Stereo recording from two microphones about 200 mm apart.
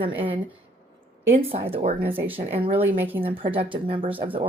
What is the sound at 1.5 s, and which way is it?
Speech, 30° right (ahead or behind).